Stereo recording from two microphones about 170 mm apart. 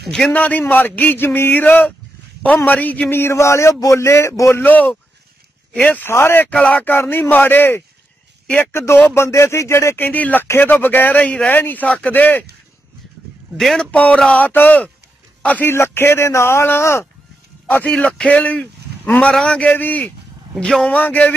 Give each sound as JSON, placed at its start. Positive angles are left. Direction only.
{"t": 0.1, "sound": "speech", "side_deg": 5}
{"t": 13.6, "sound": "a man's voice", "side_deg": 5}